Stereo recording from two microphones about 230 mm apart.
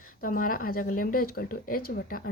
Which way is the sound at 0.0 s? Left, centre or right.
Left.